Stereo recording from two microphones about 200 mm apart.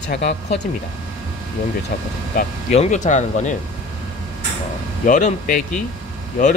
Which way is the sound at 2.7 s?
35° left (ahead or behind).